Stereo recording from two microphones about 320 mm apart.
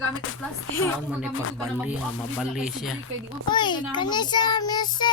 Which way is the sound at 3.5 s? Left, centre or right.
Centre.